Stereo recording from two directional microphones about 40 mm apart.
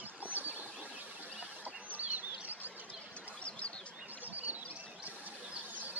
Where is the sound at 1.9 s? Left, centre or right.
Right.